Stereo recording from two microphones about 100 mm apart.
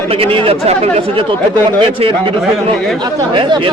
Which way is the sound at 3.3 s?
50° right (ahead or behind).